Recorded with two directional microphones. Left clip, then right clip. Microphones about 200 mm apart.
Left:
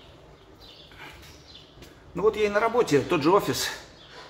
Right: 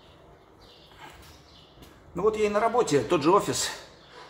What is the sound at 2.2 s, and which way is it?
A man's voice, 5° left (ahead or behind).